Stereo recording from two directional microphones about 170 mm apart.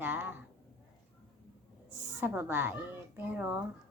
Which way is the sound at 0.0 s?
10° right (ahead or behind).